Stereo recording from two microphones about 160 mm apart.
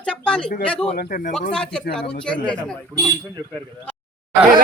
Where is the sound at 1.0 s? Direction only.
65° left (ahead or behind).